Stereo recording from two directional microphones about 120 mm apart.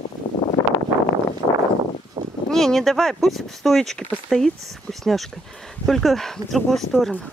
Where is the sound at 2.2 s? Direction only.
45° right (ahead or behind).